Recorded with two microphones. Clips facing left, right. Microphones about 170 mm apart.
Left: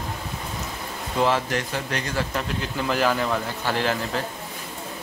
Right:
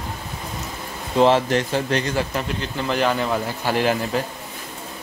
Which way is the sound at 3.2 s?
15° right (ahead or behind).